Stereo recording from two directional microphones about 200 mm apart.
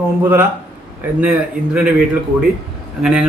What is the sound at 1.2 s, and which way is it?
Speech, 5° right (ahead or behind).